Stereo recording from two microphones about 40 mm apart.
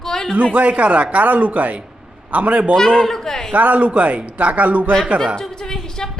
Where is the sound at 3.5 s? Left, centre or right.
Right.